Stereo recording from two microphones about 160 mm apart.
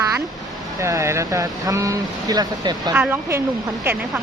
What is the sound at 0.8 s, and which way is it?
Speech, 20° right (ahead or behind).